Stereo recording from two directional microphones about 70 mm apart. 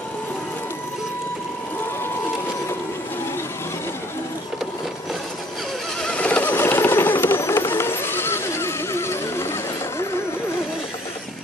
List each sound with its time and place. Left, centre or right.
6.0 s helicopter: centre; by 10.2 s left